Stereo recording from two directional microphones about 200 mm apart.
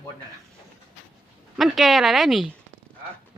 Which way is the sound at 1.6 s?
Centre (ahead or behind).